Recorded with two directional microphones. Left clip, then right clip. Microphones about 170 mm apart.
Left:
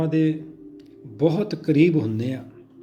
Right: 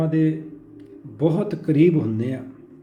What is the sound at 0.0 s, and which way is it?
Speech, 30° left (ahead or behind).